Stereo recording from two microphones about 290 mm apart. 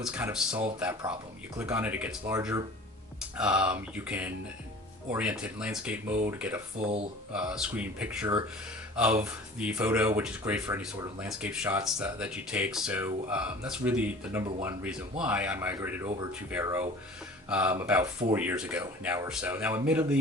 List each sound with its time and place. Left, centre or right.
0.0 s speech: centre
6.7 s speech: right
7.3 s speech: centre